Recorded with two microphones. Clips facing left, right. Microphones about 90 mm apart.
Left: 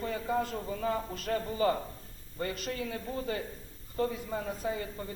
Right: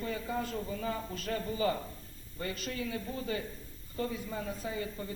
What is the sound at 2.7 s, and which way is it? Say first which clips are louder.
A man's voice: left 1 dB; 40° left (ahead or behind).